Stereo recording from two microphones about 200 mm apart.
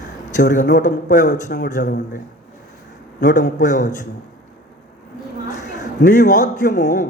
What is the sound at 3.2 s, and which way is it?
Speech, 40° left (ahead or behind).